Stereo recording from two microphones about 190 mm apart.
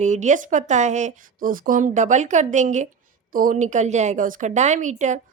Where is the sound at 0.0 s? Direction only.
40° right (ahead or behind).